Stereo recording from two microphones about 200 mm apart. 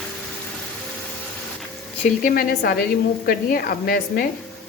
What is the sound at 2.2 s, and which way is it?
A woman's voice, 50° left (ahead or behind).